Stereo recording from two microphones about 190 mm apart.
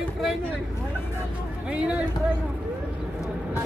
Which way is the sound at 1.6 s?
5° right (ahead or behind).